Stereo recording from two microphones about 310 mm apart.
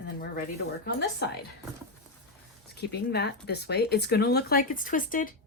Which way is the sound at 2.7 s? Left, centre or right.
Left.